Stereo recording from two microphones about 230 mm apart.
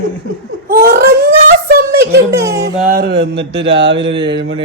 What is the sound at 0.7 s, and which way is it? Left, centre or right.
A woman's voice, right.